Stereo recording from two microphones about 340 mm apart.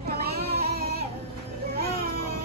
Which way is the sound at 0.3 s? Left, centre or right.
Right.